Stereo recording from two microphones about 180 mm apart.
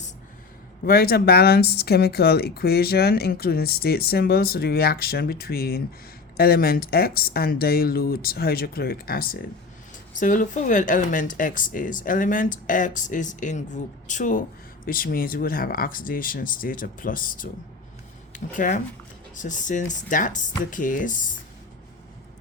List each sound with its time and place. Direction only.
0.9 s speech: 55° left (ahead or behind)